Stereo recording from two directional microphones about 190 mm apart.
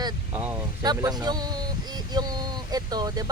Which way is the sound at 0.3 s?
10° right (ahead or behind).